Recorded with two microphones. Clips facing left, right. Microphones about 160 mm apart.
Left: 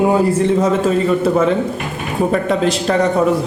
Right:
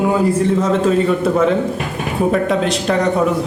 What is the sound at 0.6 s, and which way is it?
A man's voice, centre (ahead or behind).